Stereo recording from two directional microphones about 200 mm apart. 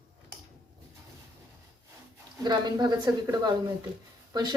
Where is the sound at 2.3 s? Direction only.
20° right (ahead or behind).